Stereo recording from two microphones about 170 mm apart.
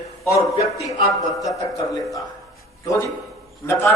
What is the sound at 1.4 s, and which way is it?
Speech, 20° left (ahead or behind).